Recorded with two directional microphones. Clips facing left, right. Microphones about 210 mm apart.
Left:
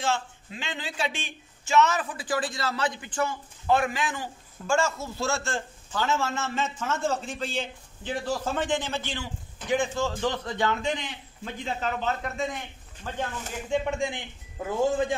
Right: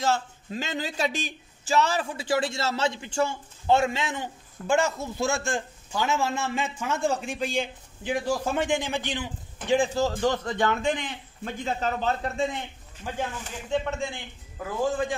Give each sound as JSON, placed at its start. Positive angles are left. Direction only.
{"t": 0.0, "sound": "speech", "side_deg": -40}
{"t": 9.7, "sound": "speech", "side_deg": -35}
{"t": 10.1, "sound": "a man's voice", "side_deg": -45}
{"t": 13.0, "sound": "speech", "side_deg": -15}
{"t": 13.7, "sound": "a man's voice", "side_deg": 15}